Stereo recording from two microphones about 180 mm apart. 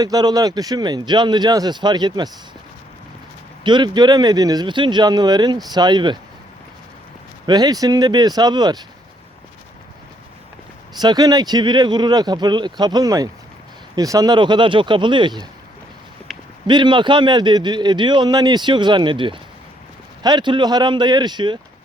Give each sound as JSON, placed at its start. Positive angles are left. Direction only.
{"t": 0.0, "sound": "a man's voice", "side_deg": -20}
{"t": 3.6, "sound": "a man's voice", "side_deg": -25}
{"t": 7.4, "sound": "a man's voice", "side_deg": -20}
{"t": 11.0, "sound": "a man's voice", "side_deg": -20}
{"t": 16.3, "sound": "a sound", "side_deg": 0}
{"t": 16.6, "sound": "a man's voice", "side_deg": -25}